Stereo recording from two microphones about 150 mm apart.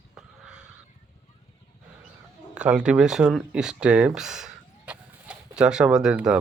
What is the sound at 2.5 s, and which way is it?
Speech, 5° right (ahead or behind).